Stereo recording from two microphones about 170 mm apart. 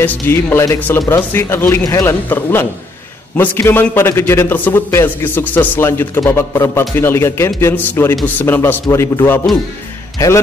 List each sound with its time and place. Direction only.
0.0 s a man's voice: 15° left (ahead or behind)